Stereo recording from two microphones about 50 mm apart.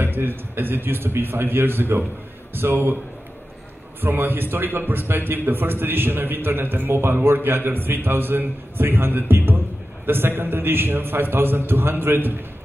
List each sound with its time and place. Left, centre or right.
0.0 s a man's voice: right
4.0 s a man's voice: right